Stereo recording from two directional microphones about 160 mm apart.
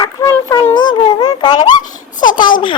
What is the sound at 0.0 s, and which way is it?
Child singing, 20° left (ahead or behind).